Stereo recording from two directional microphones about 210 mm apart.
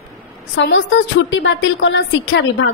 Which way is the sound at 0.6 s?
60° left (ahead or behind).